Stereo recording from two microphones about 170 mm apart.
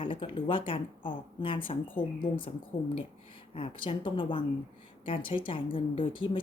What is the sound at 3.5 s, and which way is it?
A woman's voice, 30° left (ahead or behind).